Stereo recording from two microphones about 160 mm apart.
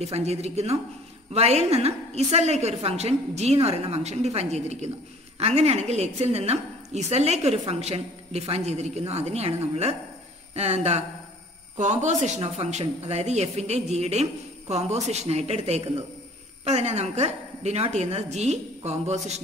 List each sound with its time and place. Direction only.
0.0 s a woman's voice: 40° right (ahead or behind)